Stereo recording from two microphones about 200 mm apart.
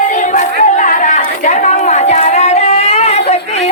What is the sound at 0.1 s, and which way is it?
Chatter, 40° left (ahead or behind).